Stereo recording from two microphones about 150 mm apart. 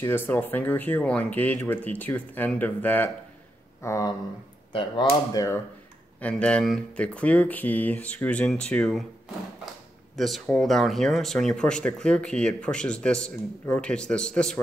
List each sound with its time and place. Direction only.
0.0 s speech: 15° left (ahead or behind)
5.3 s speech: 25° left (ahead or behind)
6.2 s speech: 10° left (ahead or behind)
10.1 s speech: centre (ahead or behind)